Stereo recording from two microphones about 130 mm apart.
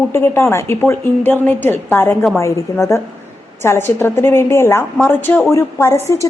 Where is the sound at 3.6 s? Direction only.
20° left (ahead or behind).